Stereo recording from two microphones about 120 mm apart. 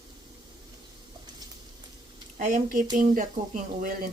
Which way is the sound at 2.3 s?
90° right.